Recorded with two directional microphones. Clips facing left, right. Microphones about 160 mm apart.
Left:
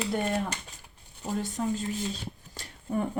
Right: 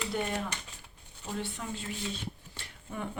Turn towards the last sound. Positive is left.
turn(degrees=40)  # may be behind; listen again after turning